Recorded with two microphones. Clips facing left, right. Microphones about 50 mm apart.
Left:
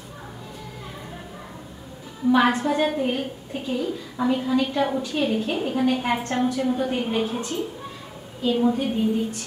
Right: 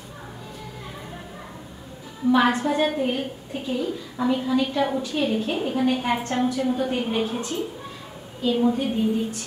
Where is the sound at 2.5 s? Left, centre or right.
Left.